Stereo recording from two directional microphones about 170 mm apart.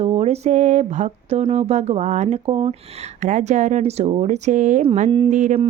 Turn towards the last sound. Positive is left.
turn(degrees=-45)  # may be behind; listen again after turning